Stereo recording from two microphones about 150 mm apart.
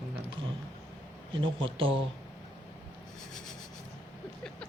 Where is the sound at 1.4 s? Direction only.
35° right (ahead or behind).